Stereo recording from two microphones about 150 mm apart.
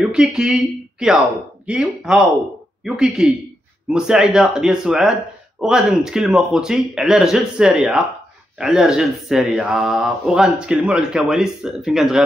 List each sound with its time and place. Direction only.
0.1 s speech: 5° right (ahead or behind)